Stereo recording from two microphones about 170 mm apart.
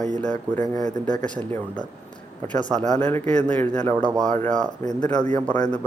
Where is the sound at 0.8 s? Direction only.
45° right (ahead or behind).